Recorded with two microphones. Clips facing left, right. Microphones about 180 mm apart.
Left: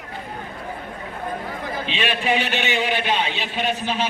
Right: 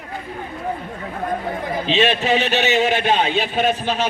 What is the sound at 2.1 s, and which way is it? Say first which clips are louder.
Speech: right 3 dB; 25° right (ahead or behind).